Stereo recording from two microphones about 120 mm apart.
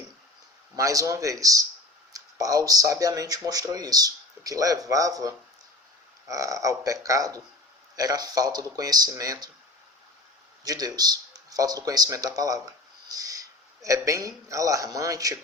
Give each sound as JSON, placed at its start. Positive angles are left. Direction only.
{"t": 0.8, "sound": "speech", "side_deg": -25}
{"t": 10.6, "sound": "speech", "side_deg": -30}
{"t": 13.1, "sound": "owl", "side_deg": -30}
{"t": 13.8, "sound": "speech", "side_deg": -25}